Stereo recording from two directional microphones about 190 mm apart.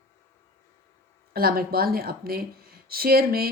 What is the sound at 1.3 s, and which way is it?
A woman's voice, 55° right (ahead or behind).